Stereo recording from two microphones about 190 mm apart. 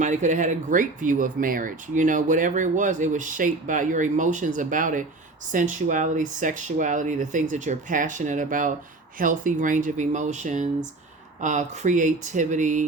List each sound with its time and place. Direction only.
0.0 s speech: 40° right (ahead or behind)